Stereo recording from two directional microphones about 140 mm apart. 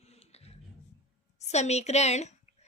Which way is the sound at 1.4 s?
50° left (ahead or behind).